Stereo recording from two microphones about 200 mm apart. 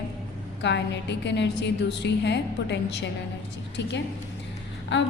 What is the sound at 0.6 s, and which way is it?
A woman's voice, 60° left (ahead or behind).